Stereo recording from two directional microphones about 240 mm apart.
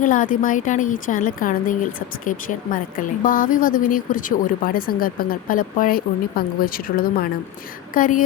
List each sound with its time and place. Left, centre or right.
0.0 s speech: left